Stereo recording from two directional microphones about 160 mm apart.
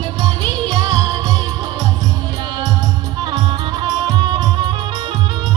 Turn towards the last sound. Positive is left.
turn(degrees=-25)  # may be behind; listen again after turning